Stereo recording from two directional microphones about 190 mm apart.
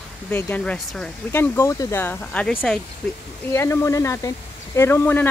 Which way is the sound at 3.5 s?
15° left (ahead or behind).